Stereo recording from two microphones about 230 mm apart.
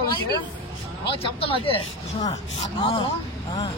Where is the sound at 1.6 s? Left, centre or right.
Left.